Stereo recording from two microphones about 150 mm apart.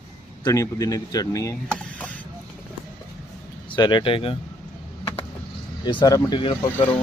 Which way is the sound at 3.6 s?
30° left (ahead or behind).